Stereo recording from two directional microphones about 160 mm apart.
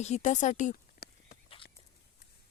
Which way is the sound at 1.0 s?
75° left (ahead or behind).